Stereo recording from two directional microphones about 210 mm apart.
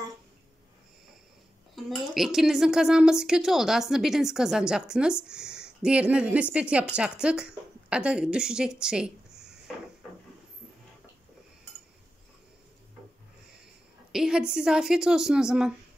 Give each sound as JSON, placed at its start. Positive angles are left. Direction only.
{"t": 1.8, "sound": "a woman's voice", "side_deg": 0}
{"t": 14.1, "sound": "a woman's voice", "side_deg": 0}